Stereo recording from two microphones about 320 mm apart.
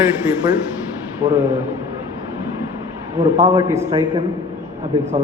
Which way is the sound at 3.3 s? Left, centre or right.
Centre.